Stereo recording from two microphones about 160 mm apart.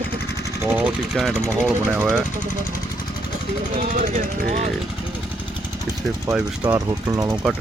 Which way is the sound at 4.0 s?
55° right (ahead or behind).